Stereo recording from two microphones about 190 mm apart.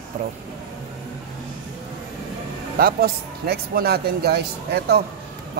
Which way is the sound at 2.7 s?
55° right (ahead or behind).